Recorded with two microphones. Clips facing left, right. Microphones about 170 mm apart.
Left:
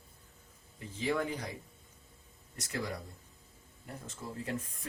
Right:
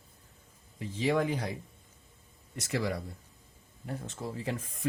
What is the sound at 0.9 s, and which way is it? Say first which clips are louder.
Speech: right 5 dB; 80° right.